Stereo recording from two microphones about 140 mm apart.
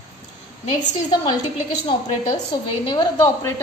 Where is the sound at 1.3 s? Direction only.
30° left (ahead or behind).